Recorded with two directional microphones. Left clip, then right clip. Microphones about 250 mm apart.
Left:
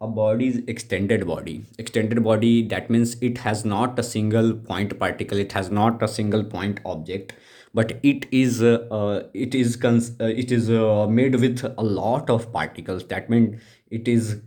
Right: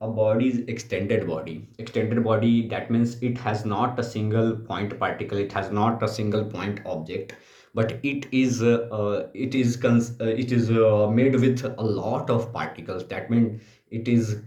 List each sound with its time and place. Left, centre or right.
0.3 s speech: left